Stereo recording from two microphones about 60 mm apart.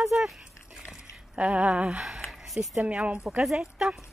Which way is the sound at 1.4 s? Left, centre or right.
Right.